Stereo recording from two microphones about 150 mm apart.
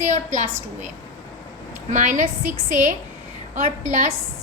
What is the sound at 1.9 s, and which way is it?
A woman's voice, 55° right (ahead or behind).